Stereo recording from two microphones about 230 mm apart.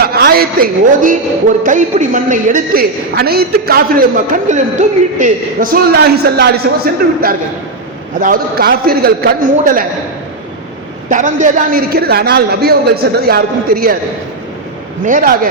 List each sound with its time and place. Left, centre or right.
0.0 s a woman's voice: right
11.1 s a woman's voice: right
15.0 s a woman's voice: right